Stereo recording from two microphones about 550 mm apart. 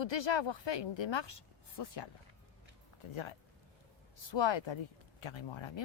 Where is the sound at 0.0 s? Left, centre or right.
Left.